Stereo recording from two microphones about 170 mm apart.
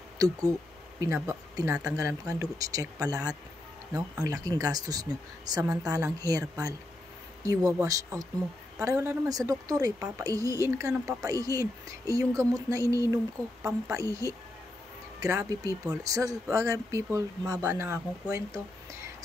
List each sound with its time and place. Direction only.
0.2 s speech: 20° right (ahead or behind)
7.4 s speech: 20° right (ahead or behind)